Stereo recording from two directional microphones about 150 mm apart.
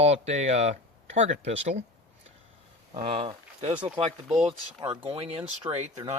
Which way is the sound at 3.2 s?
45° right (ahead or behind).